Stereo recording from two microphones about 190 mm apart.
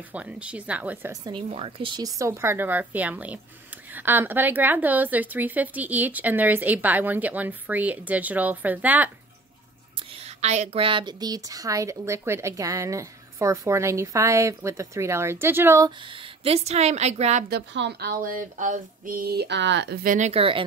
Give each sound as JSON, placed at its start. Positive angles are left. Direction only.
{"t": 0.1, "sound": "speech", "side_deg": -5}
{"t": 9.9, "sound": "speech", "side_deg": -30}
{"t": 16.0, "sound": "a woman's voice", "side_deg": -25}
{"t": 17.5, "sound": "speech", "side_deg": -65}